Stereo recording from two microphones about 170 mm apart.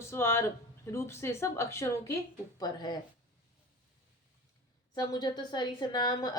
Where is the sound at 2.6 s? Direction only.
25° left (ahead or behind).